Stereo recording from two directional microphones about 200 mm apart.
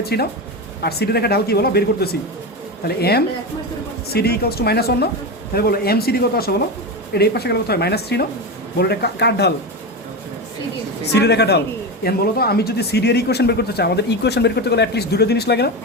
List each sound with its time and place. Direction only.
0.0 s speech: 50° left (ahead or behind)
11.1 s speech: 55° left (ahead or behind)